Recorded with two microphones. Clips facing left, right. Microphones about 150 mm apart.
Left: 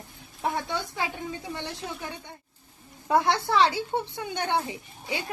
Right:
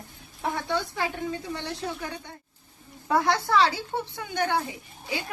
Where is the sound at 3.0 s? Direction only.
20° left (ahead or behind).